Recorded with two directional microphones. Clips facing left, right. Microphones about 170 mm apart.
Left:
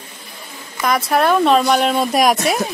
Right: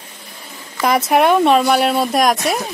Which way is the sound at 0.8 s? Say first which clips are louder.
Right 2 dB; 25° right (ahead or behind).